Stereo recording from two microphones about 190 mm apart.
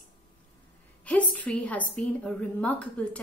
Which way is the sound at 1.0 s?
5° left (ahead or behind).